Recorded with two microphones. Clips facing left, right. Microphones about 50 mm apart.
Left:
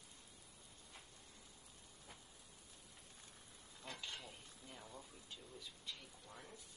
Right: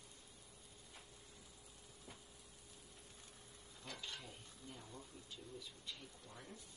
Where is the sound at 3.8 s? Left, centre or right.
Centre.